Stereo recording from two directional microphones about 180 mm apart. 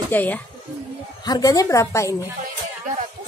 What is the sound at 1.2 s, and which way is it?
Speech, 20° left (ahead or behind).